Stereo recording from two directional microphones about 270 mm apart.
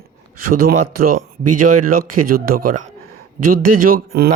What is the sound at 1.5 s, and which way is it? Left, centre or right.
Speech, right.